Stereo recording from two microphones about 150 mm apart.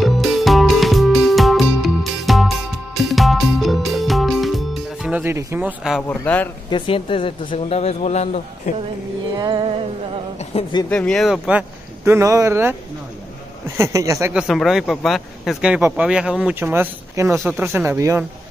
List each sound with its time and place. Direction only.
0.0 s music: centre (ahead or behind)
6.0 s speech: 10° left (ahead or behind)
6.7 s speech: 35° left (ahead or behind)
9.3 s music: 30° right (ahead or behind)
10.5 s speech: 45° left (ahead or behind)
10.9 s speech: 5° left (ahead or behind); by 12.7 s 15° right (ahead or behind)
13.7 s speech: 20° right (ahead or behind)
14.3 s speech: centre (ahead or behind); by 18.2 s 15° right (ahead or behind)